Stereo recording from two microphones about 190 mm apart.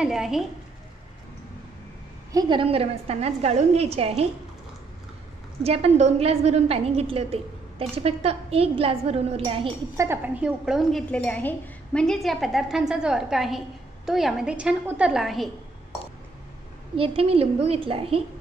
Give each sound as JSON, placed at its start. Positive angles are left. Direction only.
{"t": 0.0, "sound": "a woman's voice", "side_deg": 0}
{"t": 2.3, "sound": "a woman's voice", "side_deg": -30}
{"t": 5.6, "sound": "a woman's voice", "side_deg": -35}
{"t": 9.9, "sound": "a woman's voice", "side_deg": -15}
{"t": 16.9, "sound": "a woman's voice", "side_deg": -30}